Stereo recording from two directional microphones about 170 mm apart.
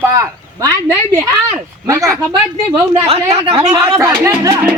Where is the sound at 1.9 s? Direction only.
20° right (ahead or behind).